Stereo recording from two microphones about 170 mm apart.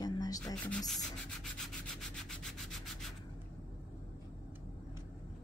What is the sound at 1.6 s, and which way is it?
Rub, centre (ahead or behind).